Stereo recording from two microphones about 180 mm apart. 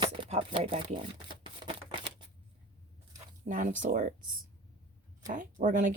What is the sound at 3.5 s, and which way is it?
Speech, 45° right (ahead or behind).